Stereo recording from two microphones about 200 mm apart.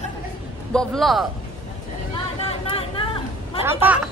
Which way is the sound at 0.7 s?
Centre (ahead or behind).